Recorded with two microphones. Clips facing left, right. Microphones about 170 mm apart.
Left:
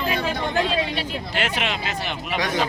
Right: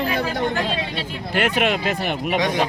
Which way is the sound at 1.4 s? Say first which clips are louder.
Right 7 dB; 55° right (ahead or behind).